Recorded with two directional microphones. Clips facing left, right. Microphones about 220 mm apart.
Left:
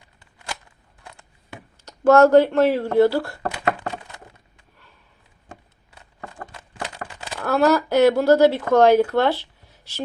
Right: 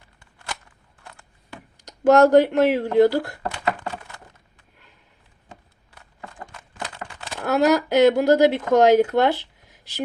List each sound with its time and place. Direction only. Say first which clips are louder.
1.0 s camera: left 1 dB; 20° left (ahead or behind)
1.8 s speech: left 1 dB; 15° right (ahead or behind)
7.4 s speech: even; 15° right (ahead or behind)